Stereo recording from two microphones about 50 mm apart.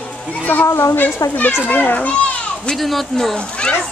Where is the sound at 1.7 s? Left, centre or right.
Left.